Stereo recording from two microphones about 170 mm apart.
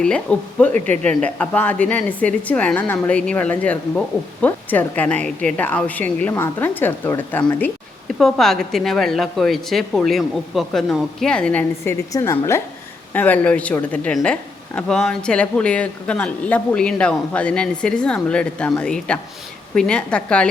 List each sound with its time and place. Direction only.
0.0 s a woman's voice: 5° left (ahead or behind)